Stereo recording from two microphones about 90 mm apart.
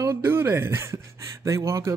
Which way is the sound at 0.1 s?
25° right (ahead or behind).